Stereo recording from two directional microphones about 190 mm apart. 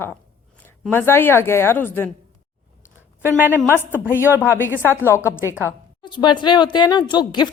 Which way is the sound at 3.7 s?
10° left (ahead or behind).